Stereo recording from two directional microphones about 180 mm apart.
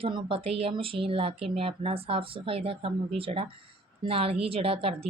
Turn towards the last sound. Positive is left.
turn(degrees=-35)  # may be behind; listen again after turning